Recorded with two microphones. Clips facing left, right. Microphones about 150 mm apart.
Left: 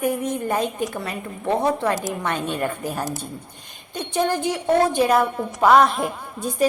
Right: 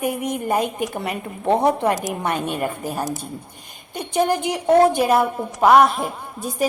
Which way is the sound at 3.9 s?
15° right (ahead or behind).